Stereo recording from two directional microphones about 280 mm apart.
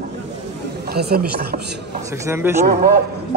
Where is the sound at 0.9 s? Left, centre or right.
Right.